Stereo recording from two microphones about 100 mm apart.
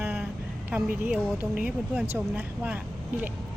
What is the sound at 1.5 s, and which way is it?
Speech, 10° right (ahead or behind).